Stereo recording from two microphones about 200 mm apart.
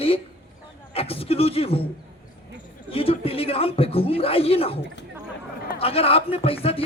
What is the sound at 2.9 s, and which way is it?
Speech, 30° left (ahead or behind).